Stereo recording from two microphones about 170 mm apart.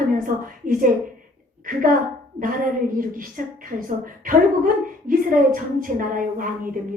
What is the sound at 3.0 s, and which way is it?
A woman's voice, 55° right (ahead or behind).